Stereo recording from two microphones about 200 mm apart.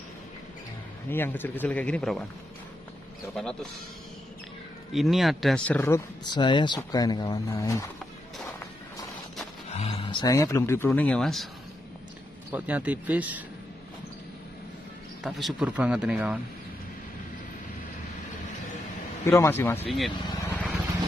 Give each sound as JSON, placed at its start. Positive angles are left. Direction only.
{"t": 1.1, "sound": "speech", "side_deg": 10}
{"t": 4.9, "sound": "speech", "side_deg": 0}
{"t": 9.7, "sound": "a sound", "side_deg": 30}
{"t": 10.2, "sound": "speech", "side_deg": 15}
{"t": 12.5, "sound": "speech", "side_deg": -10}
{"t": 15.2, "sound": "speech", "side_deg": 0}
{"t": 19.2, "sound": "speech", "side_deg": 15}
{"t": 20.1, "sound": "vehicle", "side_deg": 20}